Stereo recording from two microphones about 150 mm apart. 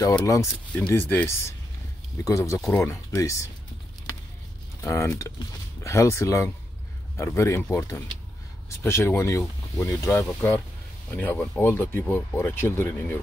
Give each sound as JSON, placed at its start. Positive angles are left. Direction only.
{"t": 0.2, "sound": "speech", "side_deg": 20}
{"t": 4.8, "sound": "speech", "side_deg": 20}